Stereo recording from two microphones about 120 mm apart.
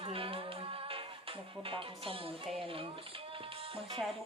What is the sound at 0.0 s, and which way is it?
Music, 50° right (ahead or behind).